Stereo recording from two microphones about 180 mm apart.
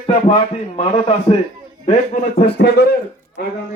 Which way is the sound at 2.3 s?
65° left (ahead or behind).